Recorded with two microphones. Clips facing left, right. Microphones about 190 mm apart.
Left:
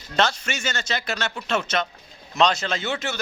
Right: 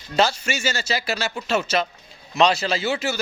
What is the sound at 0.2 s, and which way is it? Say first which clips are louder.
A man's voice: right 3 dB; 10° right (ahead or behind).